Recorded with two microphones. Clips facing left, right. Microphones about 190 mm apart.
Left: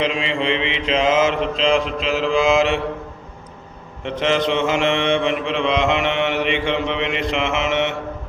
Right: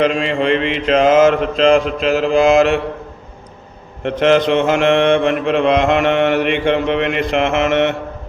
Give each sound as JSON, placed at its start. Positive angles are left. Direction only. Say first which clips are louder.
{"t": 0.0, "sound": "mantra", "louder": "right 6 dB", "side_deg": -50}
{"t": 4.0, "sound": "mantra", "louder": "right 6 dB", "side_deg": -55}